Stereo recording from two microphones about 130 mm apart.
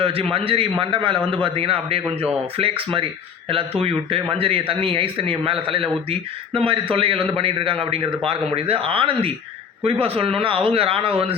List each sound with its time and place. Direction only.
0.0 s a man's voice: 45° right (ahead or behind)